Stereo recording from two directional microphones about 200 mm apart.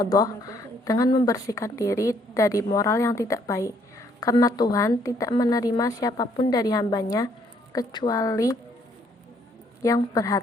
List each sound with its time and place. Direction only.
0.0 s a woman's voice: 20° left (ahead or behind)
9.8 s a woman's voice: 15° left (ahead or behind)